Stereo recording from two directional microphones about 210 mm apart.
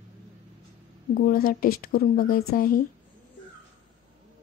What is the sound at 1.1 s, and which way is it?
Speech, 40° left (ahead or behind).